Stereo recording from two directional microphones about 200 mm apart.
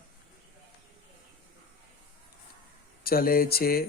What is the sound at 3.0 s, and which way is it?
Speech, 50° left (ahead or behind).